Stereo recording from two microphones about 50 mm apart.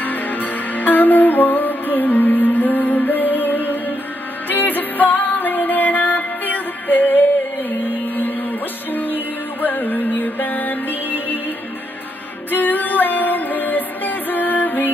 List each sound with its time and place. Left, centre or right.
0.0 s music: left
12.4 s music: left